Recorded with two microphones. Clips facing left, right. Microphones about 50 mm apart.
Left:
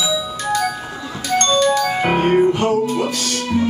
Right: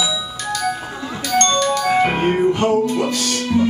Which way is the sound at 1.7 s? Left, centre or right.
Centre.